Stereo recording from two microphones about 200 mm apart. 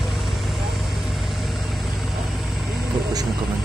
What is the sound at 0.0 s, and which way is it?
Vehicle, centre (ahead or behind).